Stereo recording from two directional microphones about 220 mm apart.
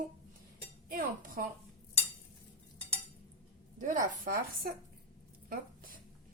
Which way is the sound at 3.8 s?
35° right (ahead or behind).